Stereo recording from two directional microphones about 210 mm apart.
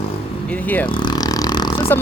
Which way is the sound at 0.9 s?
20° left (ahead or behind).